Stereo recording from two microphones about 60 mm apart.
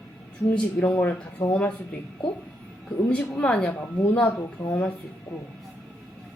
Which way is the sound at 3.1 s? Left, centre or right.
Left.